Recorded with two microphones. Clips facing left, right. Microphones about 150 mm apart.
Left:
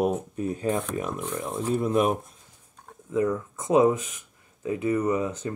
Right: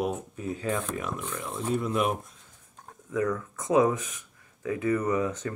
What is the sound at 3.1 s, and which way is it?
Speech, 25° left (ahead or behind).